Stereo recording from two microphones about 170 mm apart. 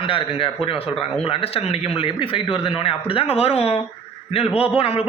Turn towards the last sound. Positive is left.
turn(degrees=35)  # may be behind; listen again after turning